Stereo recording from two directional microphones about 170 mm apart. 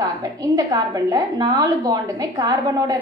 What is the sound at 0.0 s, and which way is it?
A woman's voice, 20° right (ahead or behind).